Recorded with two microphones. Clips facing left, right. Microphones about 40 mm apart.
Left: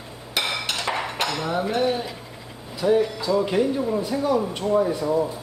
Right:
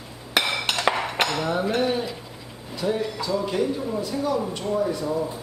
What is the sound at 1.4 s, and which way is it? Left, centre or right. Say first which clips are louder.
Cutlery: even; centre.